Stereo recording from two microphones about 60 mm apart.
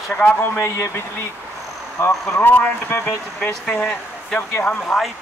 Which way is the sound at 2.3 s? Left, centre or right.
Left.